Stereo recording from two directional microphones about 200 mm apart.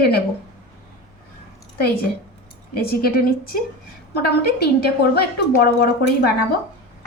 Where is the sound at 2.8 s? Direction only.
50° left (ahead or behind).